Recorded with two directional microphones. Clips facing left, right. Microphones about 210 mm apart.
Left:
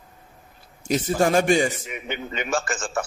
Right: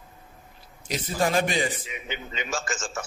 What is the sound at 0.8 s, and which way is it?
A man's voice, 45° left (ahead or behind).